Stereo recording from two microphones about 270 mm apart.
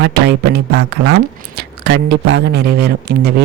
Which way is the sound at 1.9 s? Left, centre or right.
Right.